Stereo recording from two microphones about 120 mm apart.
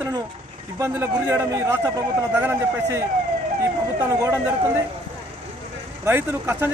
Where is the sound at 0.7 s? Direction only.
20° right (ahead or behind).